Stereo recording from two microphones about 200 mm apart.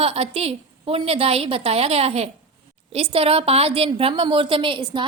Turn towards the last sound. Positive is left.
turn(degrees=-25)  # may be behind; listen again after turning